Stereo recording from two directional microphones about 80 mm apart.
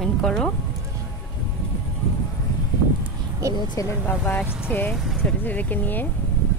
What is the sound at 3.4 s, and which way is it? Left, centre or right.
Speech, right.